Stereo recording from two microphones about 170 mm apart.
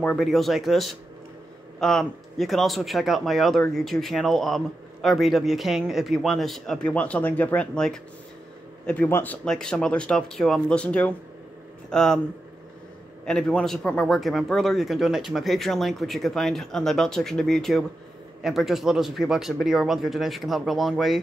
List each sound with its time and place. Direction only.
0.0 s speech: 5° left (ahead or behind)
13.2 s speech: 5° left (ahead or behind)